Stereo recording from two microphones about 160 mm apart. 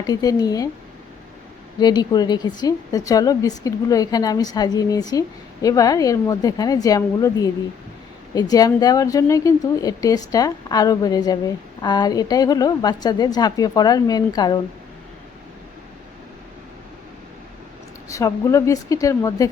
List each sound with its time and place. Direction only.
0.1 s speech: 25° left (ahead or behind)
1.8 s speech: 25° left (ahead or behind)
18.1 s speech: 20° left (ahead or behind)